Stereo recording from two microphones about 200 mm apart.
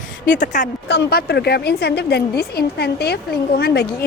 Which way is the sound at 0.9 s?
55° left (ahead or behind).